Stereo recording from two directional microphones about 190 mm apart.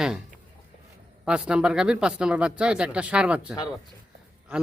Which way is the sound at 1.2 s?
5° right (ahead or behind).